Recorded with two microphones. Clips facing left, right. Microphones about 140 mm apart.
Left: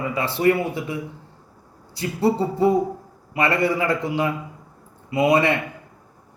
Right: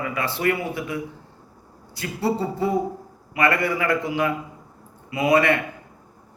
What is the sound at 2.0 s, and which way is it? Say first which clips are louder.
A man's voice: left 4 dB; 25° left (ahead or behind).